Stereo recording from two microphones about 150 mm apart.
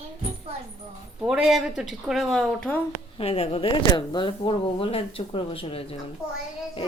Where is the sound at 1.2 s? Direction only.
5° right (ahead or behind).